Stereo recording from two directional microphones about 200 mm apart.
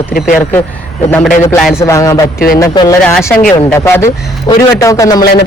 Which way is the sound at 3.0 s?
Centre (ahead or behind).